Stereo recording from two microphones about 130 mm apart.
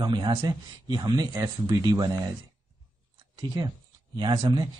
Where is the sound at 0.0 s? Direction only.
35° right (ahead or behind).